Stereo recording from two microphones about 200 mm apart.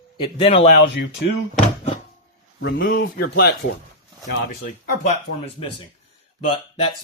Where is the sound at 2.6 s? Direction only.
55° left (ahead or behind).